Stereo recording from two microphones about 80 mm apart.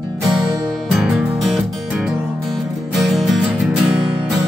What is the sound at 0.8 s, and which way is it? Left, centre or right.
Music, centre.